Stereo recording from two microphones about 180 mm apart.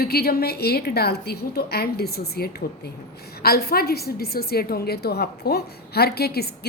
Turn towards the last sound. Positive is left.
turn(degrees=60)  # may be behind; listen again after turning